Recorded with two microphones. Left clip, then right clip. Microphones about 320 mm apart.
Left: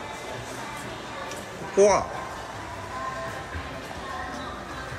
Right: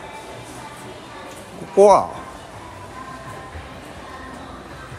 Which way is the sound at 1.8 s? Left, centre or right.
Centre.